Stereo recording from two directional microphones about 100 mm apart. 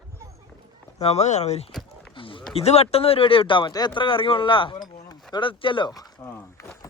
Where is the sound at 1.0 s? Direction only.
90° left.